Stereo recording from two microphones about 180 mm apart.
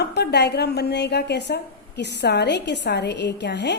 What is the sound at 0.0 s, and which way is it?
Speech, 65° left (ahead or behind).